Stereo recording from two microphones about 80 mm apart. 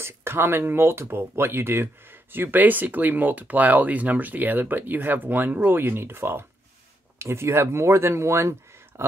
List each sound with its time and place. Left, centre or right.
0.0 s speech: right